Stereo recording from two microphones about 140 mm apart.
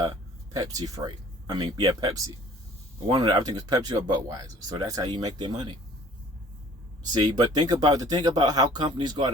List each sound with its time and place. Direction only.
0.5 s speech: 25° right (ahead or behind)
7.0 s speech: 30° right (ahead or behind)